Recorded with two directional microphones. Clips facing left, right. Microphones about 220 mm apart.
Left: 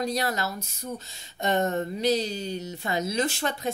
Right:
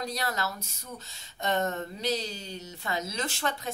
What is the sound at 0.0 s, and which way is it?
Speech, 15° left (ahead or behind).